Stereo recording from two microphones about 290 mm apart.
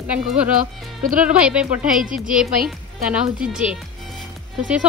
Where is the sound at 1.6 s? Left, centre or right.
Right.